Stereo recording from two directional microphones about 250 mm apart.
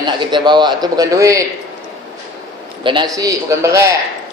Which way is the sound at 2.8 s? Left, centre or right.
Centre.